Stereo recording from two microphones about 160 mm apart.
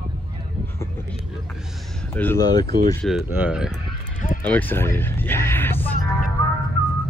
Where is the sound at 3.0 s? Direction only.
5° right (ahead or behind).